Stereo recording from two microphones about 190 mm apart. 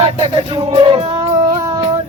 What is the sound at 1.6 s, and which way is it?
Music, 25° right (ahead or behind).